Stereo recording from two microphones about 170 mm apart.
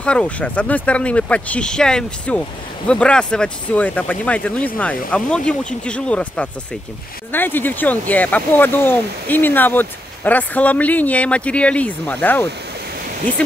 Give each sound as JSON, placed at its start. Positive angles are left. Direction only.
{"t": 0.0, "sound": "speech", "side_deg": 5}